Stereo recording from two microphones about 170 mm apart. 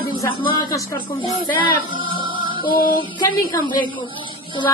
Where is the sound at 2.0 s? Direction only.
30° right (ahead or behind).